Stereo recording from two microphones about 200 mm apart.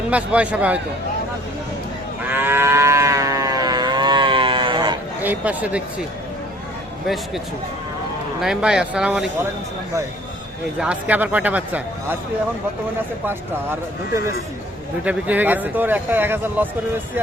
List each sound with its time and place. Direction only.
0.1 s a man's voice: 5° right (ahead or behind)
2.2 s moo: 10° right (ahead or behind)
5.2 s a man's voice: 10° right (ahead or behind)
8.4 s a man's voice: centre (ahead or behind)
10.8 s a man's voice: 5° right (ahead or behind)
13.2 s a man's voice: 10° right (ahead or behind)